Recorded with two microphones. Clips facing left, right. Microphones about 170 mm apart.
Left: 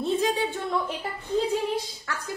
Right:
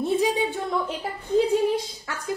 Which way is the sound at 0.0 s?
10° right (ahead or behind).